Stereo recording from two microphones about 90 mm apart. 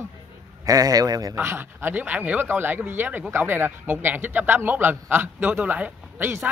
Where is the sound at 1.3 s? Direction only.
30° right (ahead or behind).